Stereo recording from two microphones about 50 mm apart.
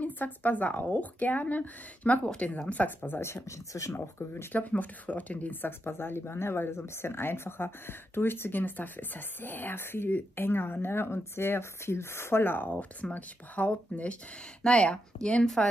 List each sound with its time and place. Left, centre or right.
0.0 s speech: left
3.4 s speech: left
4.3 s speech: left
4.6 s speech: left
5.6 s speech: left
13.0 s speech: left; by 15.7 s centre